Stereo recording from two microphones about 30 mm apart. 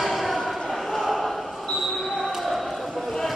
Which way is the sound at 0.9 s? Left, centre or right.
Centre.